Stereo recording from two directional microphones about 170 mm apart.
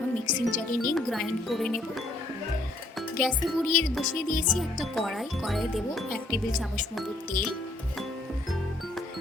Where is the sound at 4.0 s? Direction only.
50° left (ahead or behind).